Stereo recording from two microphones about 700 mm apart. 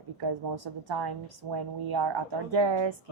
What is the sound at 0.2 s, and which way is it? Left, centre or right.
A woman's voice, right.